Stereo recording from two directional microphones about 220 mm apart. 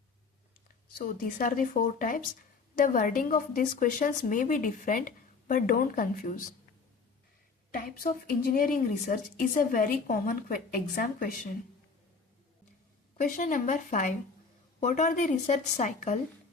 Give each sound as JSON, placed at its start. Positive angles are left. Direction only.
{"t": 0.9, "sound": "a woman's voice", "side_deg": 40}
{"t": 7.7, "sound": "a woman's voice", "side_deg": 45}
{"t": 13.1, "sound": "a woman's voice", "side_deg": 35}